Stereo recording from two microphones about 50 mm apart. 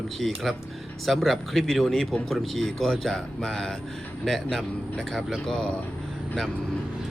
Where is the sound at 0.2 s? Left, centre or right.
Centre.